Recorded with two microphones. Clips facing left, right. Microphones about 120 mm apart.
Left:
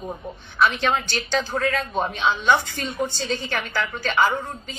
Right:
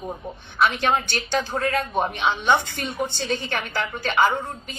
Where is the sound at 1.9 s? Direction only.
20° right (ahead or behind).